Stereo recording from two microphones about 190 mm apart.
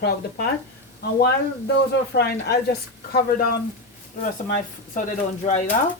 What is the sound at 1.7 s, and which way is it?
Speech, 55° left (ahead or behind).